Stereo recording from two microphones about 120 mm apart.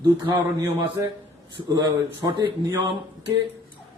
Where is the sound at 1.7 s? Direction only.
30° right (ahead or behind).